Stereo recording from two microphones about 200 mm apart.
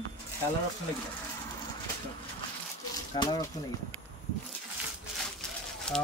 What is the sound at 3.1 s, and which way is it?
Speech, 20° left (ahead or behind).